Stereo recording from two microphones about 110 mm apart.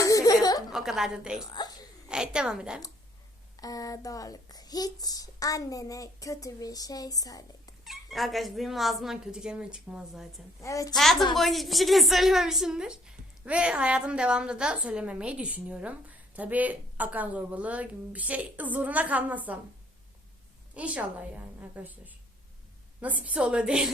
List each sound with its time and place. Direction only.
0.0 s a sound: 30° left (ahead or behind)
0.7 s speech: 5° right (ahead or behind)
1.6 s a sound: 40° left (ahead or behind)
2.0 s a woman's voice: 5° right (ahead or behind)
3.6 s speech: 35° left (ahead or behind)
7.9 s speech: centre (ahead or behind)
10.6 s a woman's voice: 30° left (ahead or behind)
10.9 s a woman's voice: centre (ahead or behind); by 19.5 s 15° right (ahead or behind)
20.7 s a woman's voice: 15° right (ahead or behind)